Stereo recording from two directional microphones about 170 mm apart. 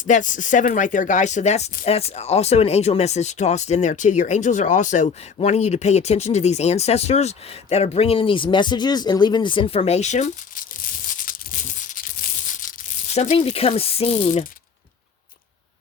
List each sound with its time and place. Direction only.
0.0 s speech: 50° left (ahead or behind)
11.1 s a sound: 50° left (ahead or behind)
13.1 s speech: 40° left (ahead or behind)